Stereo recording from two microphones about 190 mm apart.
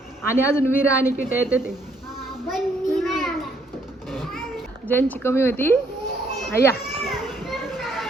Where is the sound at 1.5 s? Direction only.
5° right (ahead or behind).